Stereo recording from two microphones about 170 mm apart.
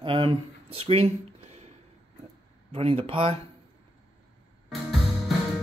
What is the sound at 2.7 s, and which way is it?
Speech, 35° right (ahead or behind).